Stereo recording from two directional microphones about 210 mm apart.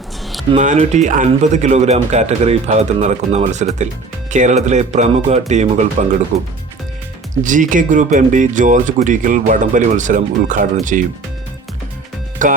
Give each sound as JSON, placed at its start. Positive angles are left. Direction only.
{"t": 0.5, "sound": "speech", "side_deg": -35}
{"t": 7.4, "sound": "speech", "side_deg": -40}
{"t": 12.4, "sound": "speech", "side_deg": -40}